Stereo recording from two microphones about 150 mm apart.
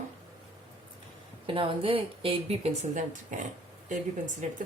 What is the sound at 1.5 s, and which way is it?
Speech, 35° right (ahead or behind).